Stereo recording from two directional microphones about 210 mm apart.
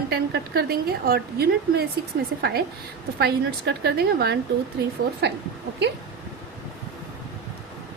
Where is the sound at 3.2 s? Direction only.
50° right (ahead or behind).